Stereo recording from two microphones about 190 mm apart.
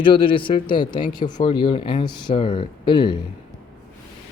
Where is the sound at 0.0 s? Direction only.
25° left (ahead or behind).